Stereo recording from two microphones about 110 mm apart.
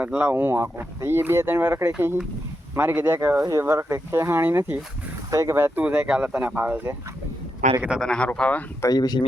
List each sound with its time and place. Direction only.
0.2 s speech: 20° right (ahead or behind)
8.0 s speech: 10° left (ahead or behind)
8.8 s speech: 35° left (ahead or behind)